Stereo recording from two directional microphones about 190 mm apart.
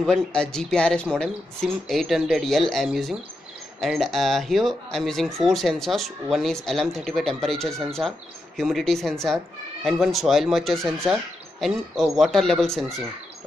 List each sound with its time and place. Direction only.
0.0 s speech: 5° left (ahead or behind)